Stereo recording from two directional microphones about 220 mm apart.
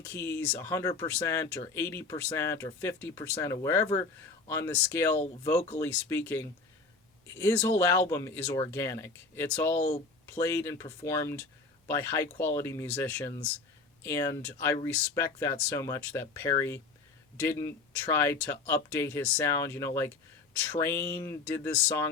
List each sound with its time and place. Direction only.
0.1 s speech: 10° left (ahead or behind)
9.7 s speech: 30° left (ahead or behind)
10.3 s speech: 10° left (ahead or behind)